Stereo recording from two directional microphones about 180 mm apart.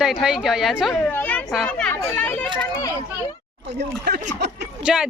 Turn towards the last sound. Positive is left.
turn(degrees=-5)  # may be behind; listen again after turning